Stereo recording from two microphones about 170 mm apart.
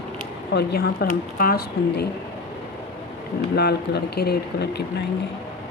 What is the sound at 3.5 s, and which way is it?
Speech, 70° left (ahead or behind).